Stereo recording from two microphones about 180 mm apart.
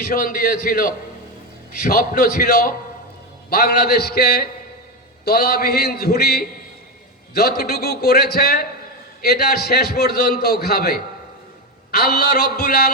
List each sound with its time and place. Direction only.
0.1 s a man's voice: 50° left (ahead or behind)